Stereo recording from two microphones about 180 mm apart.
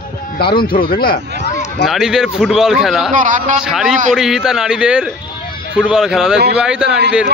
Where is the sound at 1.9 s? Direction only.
5° right (ahead or behind).